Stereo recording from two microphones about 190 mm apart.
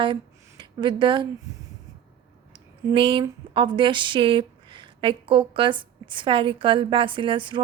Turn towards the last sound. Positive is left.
turn(degrees=-25)  # may be behind; listen again after turning